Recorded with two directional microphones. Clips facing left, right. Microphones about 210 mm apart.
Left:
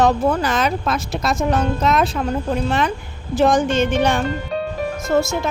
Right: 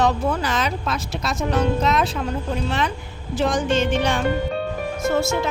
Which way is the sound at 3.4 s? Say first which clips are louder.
Left 4 dB; 50° left (ahead or behind).